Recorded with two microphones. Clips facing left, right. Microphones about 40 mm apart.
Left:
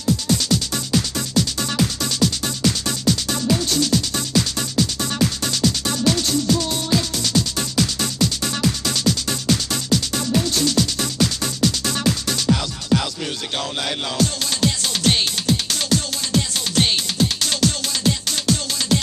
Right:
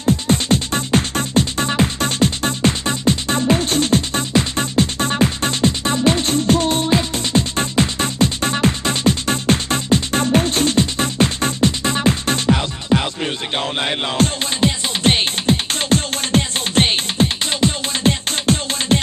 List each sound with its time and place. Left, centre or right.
0.0 s music: right